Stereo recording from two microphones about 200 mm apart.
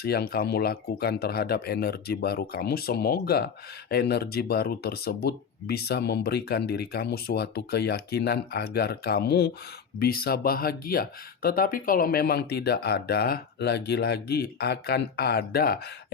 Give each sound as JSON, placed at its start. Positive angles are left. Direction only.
{"t": 0.0, "sound": "speech", "side_deg": 50}